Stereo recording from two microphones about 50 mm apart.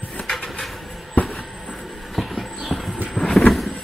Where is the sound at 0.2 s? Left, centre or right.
Centre.